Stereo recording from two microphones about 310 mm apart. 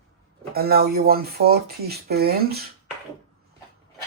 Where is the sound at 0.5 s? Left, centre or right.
Right.